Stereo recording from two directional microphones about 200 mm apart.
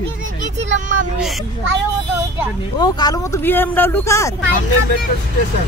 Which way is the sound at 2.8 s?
20° left (ahead or behind).